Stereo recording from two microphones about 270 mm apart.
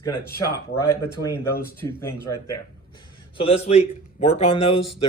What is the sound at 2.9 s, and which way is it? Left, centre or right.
A man's voice, centre.